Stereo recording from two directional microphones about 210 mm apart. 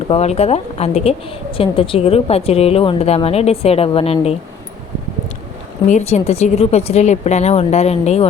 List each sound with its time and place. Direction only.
0.1 s a woman's voice: 30° left (ahead or behind)
5.9 s speech: 30° left (ahead or behind)